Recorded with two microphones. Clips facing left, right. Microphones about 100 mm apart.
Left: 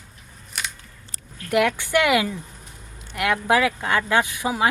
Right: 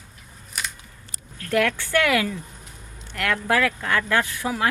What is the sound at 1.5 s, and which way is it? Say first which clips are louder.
Speech: left 2 dB; 15° left (ahead or behind).